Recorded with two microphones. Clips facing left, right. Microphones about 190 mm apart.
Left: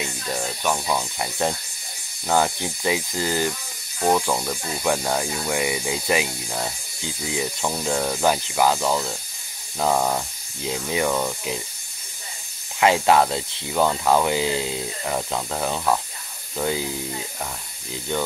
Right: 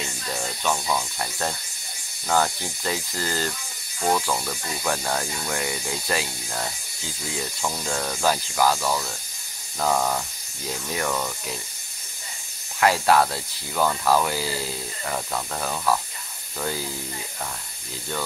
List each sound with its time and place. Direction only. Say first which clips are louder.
0.4 s speech: left 1 dB; 15° left (ahead or behind)
12.8 s speech: left 2 dB; 20° left (ahead or behind)